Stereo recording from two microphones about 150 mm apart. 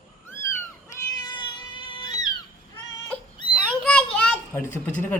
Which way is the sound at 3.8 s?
5° left (ahead or behind).